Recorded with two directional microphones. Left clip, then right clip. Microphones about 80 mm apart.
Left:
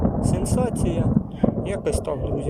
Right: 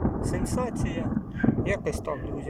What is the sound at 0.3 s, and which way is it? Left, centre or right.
Speech, left.